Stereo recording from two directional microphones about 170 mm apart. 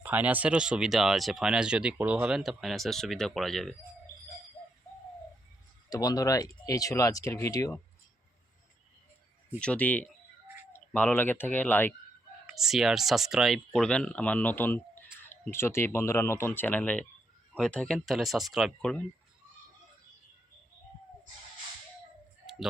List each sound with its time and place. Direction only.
0.0 s speech: 10° right (ahead or behind)
5.9 s speech: 20° left (ahead or behind)
9.6 s speech: 5° left (ahead or behind)
12.5 s speech: centre (ahead or behind)